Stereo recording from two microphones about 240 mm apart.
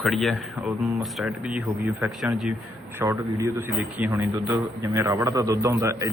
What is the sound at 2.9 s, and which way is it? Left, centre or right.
A man's voice, centre.